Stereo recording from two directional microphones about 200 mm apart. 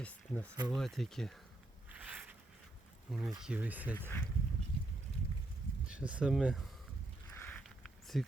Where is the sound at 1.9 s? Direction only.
5° right (ahead or behind).